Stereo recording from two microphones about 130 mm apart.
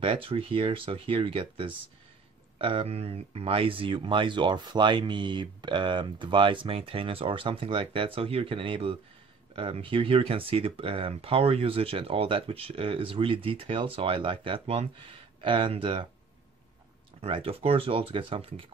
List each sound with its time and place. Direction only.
0.0 s speech: 45° right (ahead or behind)
17.2 s speech: 45° right (ahead or behind)